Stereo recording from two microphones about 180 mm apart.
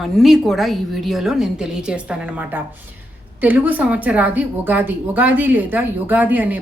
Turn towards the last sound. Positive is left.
turn(degrees=-10)  # may be behind; listen again after turning